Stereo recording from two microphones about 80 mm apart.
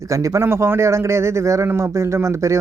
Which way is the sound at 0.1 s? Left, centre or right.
Right.